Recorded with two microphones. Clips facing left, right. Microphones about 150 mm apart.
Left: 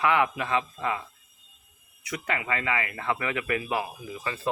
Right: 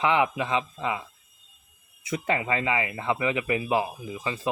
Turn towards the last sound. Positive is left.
turn(degrees=-20)  # may be behind; listen again after turning